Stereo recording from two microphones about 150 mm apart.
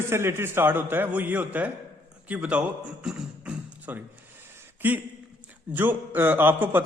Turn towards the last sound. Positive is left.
turn(degrees=-15)  # may be behind; listen again after turning